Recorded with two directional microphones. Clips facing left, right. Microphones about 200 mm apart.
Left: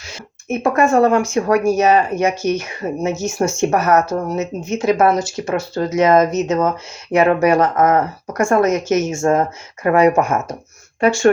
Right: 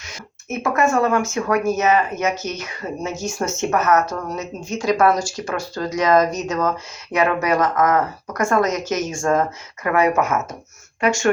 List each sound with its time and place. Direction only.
0.6 s speech: 30° left (ahead or behind)